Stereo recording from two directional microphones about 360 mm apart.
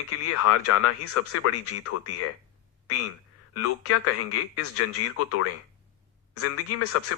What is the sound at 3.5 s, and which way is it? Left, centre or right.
Speech, left.